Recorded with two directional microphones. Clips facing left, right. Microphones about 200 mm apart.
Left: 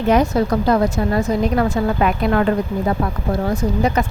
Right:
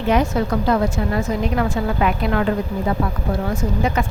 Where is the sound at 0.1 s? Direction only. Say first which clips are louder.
Left 2 dB; 40° left (ahead or behind).